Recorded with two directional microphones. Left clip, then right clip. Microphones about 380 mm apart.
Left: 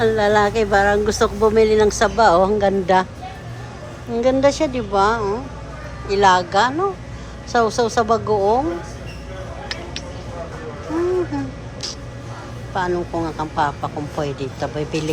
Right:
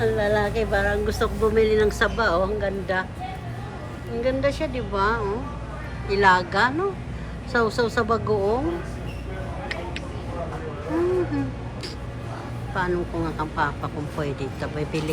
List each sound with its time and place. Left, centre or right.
0.0 s speech: centre
4.2 s speech: centre
12.7 s speech: centre